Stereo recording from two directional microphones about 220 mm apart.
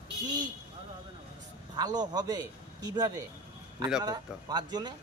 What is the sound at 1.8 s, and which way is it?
Speech, 15° right (ahead or behind).